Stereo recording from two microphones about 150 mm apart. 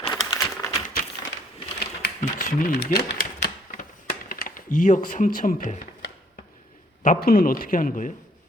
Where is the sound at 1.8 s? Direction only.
80° left; by 3.8 s 65° left (ahead or behind).